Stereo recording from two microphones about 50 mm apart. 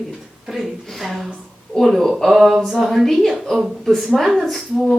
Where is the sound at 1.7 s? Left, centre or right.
Centre.